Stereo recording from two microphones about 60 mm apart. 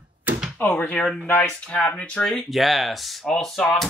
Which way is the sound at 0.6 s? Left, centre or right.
Left.